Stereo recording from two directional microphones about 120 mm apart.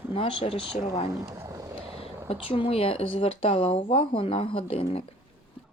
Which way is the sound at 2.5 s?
55° left (ahead or behind).